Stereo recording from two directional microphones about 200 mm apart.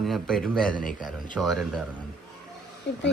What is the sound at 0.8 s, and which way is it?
Speech, 40° left (ahead or behind).